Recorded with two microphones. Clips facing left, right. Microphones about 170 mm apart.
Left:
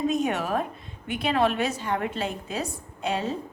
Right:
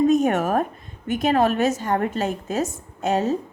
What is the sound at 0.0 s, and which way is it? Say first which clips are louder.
A woman's voice: right 7 dB; 45° right (ahead or behind).